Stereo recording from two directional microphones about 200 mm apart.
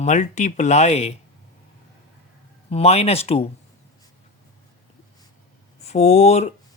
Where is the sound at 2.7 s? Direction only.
30° left (ahead or behind).